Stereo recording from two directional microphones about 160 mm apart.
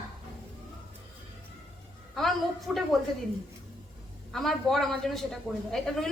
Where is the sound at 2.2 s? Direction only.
Centre (ahead or behind).